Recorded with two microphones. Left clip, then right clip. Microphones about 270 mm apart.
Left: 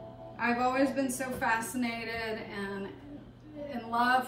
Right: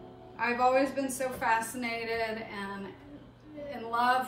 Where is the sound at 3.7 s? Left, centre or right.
Centre.